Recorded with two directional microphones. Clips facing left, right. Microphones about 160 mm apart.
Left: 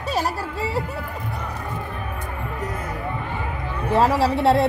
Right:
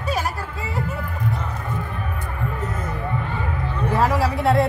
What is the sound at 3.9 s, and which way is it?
Speech, 30° left (ahead or behind).